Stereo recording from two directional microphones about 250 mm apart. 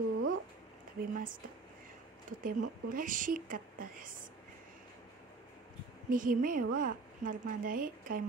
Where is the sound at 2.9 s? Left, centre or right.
Right.